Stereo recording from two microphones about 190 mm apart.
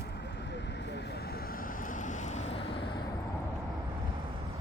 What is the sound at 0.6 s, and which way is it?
Vehicle, 65° left (ahead or behind).